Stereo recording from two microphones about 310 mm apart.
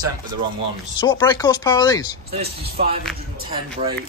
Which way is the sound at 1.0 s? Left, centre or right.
Centre.